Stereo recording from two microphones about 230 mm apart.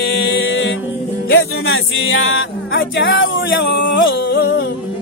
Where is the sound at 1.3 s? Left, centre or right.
Left.